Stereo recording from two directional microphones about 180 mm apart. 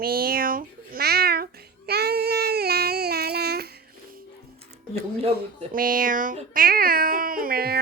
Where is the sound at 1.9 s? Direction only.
60° right (ahead or behind).